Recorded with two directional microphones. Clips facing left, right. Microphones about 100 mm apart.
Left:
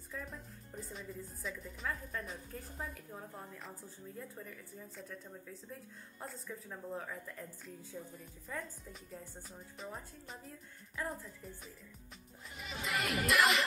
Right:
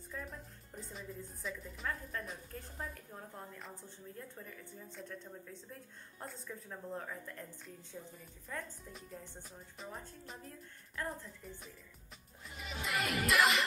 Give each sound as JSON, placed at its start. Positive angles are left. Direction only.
{"t": 0.1, "sound": "speech", "side_deg": 0}